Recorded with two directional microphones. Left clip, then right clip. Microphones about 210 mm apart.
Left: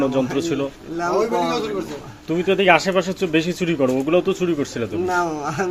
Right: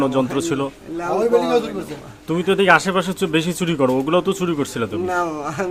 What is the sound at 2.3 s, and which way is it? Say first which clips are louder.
A man's voice: right 1 dB; 20° right (ahead or behind).